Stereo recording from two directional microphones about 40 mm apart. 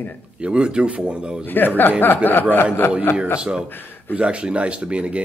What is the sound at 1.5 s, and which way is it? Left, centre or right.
Speech, left.